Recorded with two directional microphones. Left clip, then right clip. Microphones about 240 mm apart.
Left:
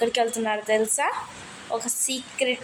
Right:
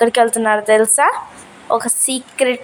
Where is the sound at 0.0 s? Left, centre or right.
Right.